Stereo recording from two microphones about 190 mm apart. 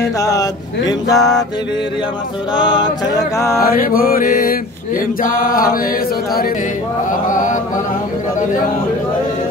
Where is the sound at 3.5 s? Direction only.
50° left (ahead or behind).